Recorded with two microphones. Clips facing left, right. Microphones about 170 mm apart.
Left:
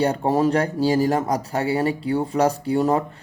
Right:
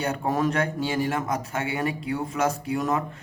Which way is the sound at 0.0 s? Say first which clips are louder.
Left 6 dB; 30° left (ahead or behind).